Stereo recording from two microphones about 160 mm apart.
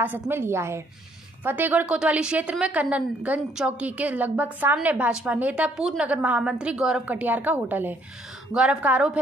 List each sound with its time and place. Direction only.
0.0 s a woman's voice: 15° right (ahead or behind)